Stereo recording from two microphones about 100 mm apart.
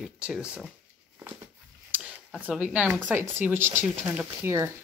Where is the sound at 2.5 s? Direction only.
10° right (ahead or behind); by 4.6 s 30° right (ahead or behind).